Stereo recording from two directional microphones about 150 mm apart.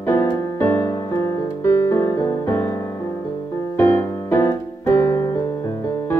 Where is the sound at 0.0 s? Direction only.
15° left (ahead or behind).